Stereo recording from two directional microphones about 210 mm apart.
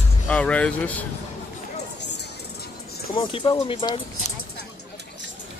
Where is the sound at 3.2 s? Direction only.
25° left (ahead or behind).